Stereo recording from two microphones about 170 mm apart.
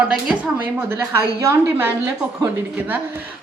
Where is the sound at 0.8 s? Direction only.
15° right (ahead or behind).